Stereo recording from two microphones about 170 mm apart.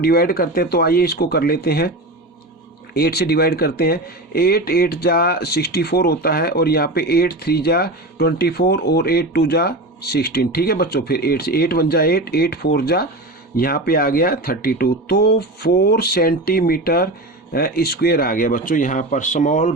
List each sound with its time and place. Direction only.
0.0 s speech: 60° left (ahead or behind)
2.9 s speech: 65° left (ahead or behind); by 19.7 s 45° left (ahead or behind)